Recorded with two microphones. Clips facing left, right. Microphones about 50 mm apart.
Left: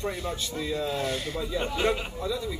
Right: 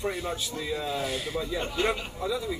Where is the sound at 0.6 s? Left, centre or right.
Centre.